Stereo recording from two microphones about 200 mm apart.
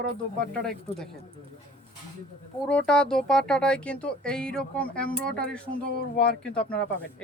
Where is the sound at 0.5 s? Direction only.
5° left (ahead or behind).